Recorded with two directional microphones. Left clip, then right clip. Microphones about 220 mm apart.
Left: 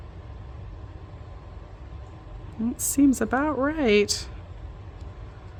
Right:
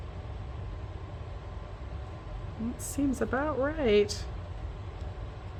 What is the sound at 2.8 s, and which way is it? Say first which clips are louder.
Speech: left 9 dB; 55° left (ahead or behind).